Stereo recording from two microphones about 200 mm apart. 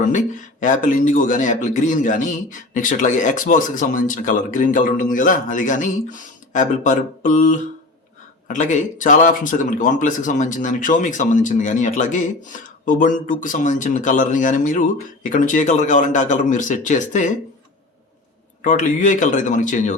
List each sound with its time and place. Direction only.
0.0 s speech: 40° left (ahead or behind)
8.5 s speech: 40° left (ahead or behind)
18.6 s speech: 40° left (ahead or behind)